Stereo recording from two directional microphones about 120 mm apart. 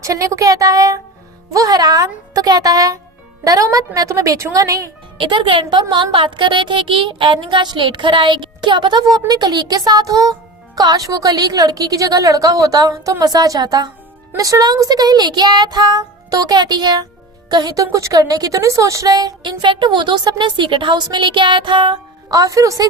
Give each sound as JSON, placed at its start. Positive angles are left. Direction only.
{"t": 0.0, "sound": "a woman's voice", "side_deg": -25}
{"t": 5.1, "sound": "speech", "side_deg": -45}
{"t": 22.3, "sound": "a woman's voice", "side_deg": -30}